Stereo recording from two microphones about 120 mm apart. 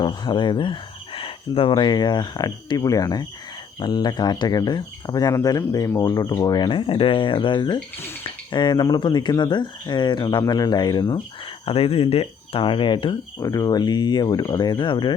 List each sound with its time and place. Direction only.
0.0 s speech: 40° left (ahead or behind)
1.7 s speech: 40° left (ahead or behind)
11.6 s speech: 55° left (ahead or behind)
13.4 s speech: 30° left (ahead or behind)